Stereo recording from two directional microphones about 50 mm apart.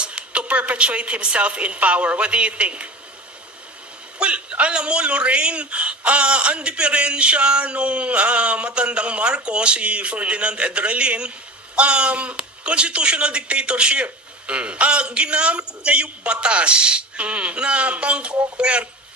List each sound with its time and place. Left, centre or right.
0.0 s a man's voice: right
4.2 s a man's voice: right